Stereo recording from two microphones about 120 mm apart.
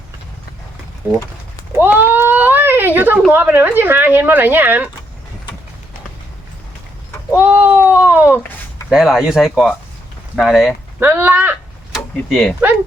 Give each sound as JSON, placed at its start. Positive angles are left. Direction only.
{"t": 1.7, "sound": "a sound", "side_deg": -20}
{"t": 3.3, "sound": "speech", "side_deg": -15}
{"t": 7.3, "sound": "speech", "side_deg": -15}
{"t": 8.9, "sound": "speech", "side_deg": -5}
{"t": 11.0, "sound": "speech", "side_deg": -15}
{"t": 11.9, "sound": "tick-tock", "side_deg": 0}